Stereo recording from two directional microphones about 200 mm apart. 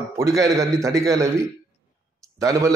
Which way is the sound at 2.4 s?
15° right (ahead or behind).